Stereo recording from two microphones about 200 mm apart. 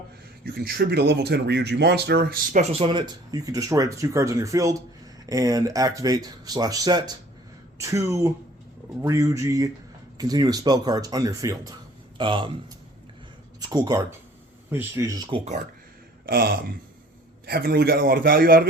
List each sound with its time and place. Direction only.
0.4 s speech: 50° right (ahead or behind)
2.7 s speech: 25° right (ahead or behind)
13.6 s speech: 20° right (ahead or behind)
16.2 s a sound: 50° right (ahead or behind)
17.4 s a man's voice: 50° right (ahead or behind)